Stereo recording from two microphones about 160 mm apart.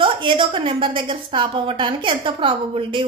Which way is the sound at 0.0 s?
30° right (ahead or behind).